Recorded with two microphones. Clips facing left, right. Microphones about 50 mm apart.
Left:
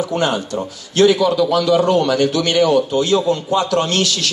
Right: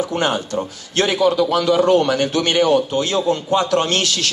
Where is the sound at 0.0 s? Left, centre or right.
Right.